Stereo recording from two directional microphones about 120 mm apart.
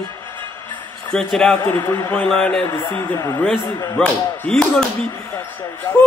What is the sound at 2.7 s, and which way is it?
Speech, 25° left (ahead or behind).